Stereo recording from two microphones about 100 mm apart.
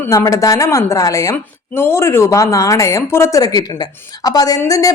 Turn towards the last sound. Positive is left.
turn(degrees=35)  # may be behind; listen again after turning